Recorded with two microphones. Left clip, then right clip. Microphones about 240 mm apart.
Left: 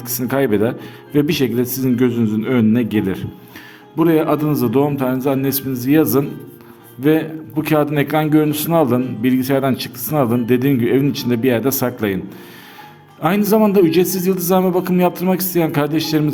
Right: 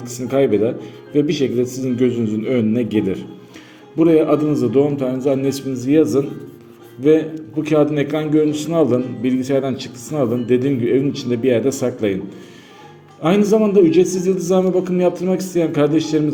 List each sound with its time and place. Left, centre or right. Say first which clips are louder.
0.0 s a man's voice: right 1 dB; left
13.2 s a man's voice: even; left